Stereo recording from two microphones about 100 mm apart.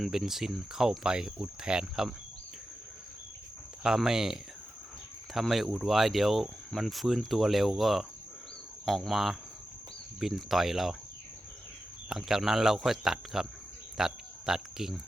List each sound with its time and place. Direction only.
0.0 s speech: centre (ahead or behind)
3.8 s speech: 5° right (ahead or behind)
12.0 s speech: 5° right (ahead or behind)